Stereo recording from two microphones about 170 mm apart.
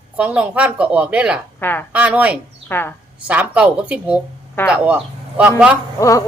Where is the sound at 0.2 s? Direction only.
10° right (ahead or behind).